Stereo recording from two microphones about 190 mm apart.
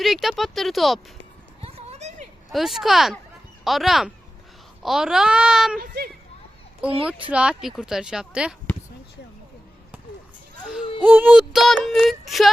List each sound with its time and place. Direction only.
0.0 s female singing: centre (ahead or behind)
1.6 s a sound: 35° right (ahead or behind)
2.5 s female singing: centre (ahead or behind)
5.8 s speech: 60° right (ahead or behind)
7.3 s female singing: 5° right (ahead or behind)
11.0 s female singing: 10° right (ahead or behind)